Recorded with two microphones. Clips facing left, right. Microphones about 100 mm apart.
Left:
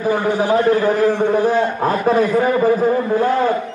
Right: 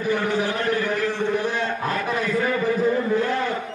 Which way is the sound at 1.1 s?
40° left (ahead or behind).